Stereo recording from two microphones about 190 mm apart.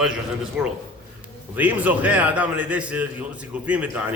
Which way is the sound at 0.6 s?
5° right (ahead or behind).